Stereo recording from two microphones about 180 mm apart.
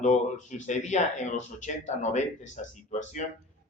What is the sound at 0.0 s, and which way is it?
A man's voice, 40° left (ahead or behind).